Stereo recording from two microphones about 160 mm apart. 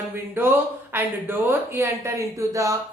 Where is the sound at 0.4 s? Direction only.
10° right (ahead or behind).